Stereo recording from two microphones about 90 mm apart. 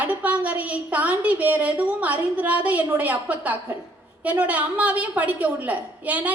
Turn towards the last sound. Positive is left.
turn(degrees=-15)  # may be behind; listen again after turning